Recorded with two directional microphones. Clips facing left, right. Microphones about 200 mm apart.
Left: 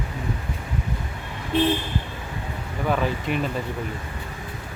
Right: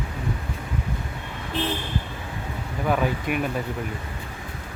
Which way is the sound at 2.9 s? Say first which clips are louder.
Even; 10° right (ahead or behind).